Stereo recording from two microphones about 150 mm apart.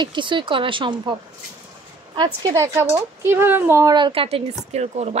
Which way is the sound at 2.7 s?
15° right (ahead or behind).